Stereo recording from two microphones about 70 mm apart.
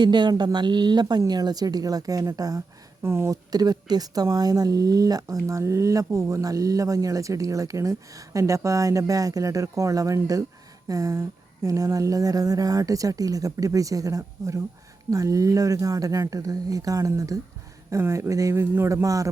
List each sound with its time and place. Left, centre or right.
0.0 s speech: right
1.3 s speech: right
3.0 s speech: right
3.5 s speech: right
18.0 s speech: right